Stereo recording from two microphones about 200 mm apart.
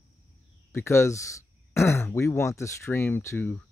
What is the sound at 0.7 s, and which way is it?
Speech, 15° left (ahead or behind).